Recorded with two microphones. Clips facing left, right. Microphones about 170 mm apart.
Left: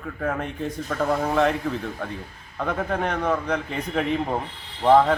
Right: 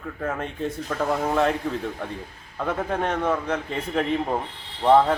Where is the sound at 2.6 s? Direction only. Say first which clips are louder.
Even; 5° right (ahead or behind).